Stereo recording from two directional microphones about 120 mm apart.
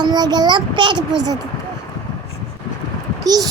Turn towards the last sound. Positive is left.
turn(degrees=-35)  # may be behind; listen again after turning